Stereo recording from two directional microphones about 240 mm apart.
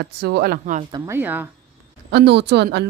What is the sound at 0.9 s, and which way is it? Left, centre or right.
Speech, centre.